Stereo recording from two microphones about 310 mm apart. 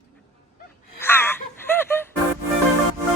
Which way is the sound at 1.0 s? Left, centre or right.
Centre.